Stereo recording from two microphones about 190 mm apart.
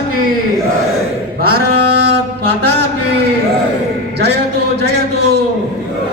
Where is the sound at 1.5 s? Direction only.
60° right (ahead or behind).